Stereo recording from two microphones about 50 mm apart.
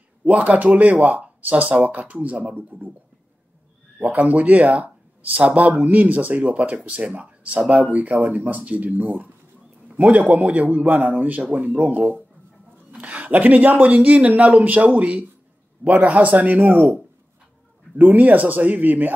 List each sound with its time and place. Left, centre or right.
0.2 s speech: right
4.2 s speech: right
17.9 s speech: right